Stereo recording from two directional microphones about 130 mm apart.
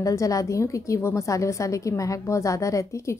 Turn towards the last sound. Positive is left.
turn(degrees=25)  # may be behind; listen again after turning